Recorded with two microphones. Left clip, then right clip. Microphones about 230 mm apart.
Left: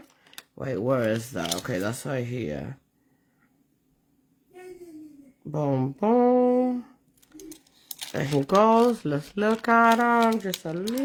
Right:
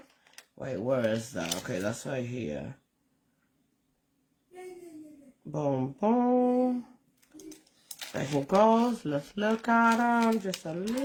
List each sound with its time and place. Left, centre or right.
0.6 s speech: left
5.5 s speech: left
7.3 s typing: centre
8.2 s speech: left